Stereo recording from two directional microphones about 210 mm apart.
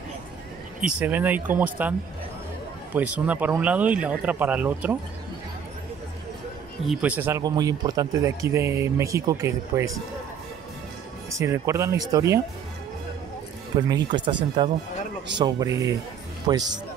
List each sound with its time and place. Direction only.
0.7 s speech: 5° right (ahead or behind)
6.9 s speech: 5° right (ahead or behind)
11.2 s speech: 15° right (ahead or behind)
13.7 s speech: 20° right (ahead or behind)